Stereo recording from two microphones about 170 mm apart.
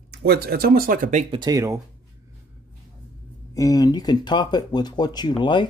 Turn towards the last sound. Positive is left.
turn(degrees=25)  # may be behind; listen again after turning